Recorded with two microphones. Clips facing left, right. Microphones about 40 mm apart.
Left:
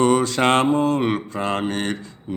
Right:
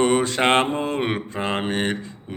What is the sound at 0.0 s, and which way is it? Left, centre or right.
Mantra, right.